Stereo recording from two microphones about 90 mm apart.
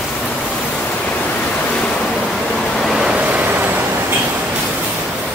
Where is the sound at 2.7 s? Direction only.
Centre (ahead or behind); by 4.1 s 20° right (ahead or behind).